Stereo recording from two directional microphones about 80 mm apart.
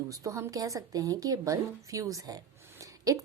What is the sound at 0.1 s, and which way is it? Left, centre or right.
A woman's voice, right.